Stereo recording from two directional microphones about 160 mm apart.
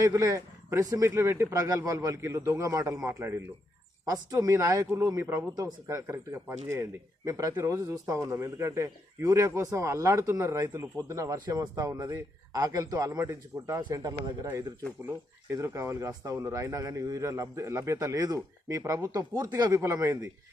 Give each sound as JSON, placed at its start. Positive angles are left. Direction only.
{"t": 0.0, "sound": "speech", "side_deg": -20}